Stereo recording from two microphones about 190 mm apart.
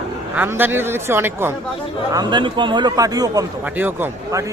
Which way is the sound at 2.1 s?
25° right (ahead or behind).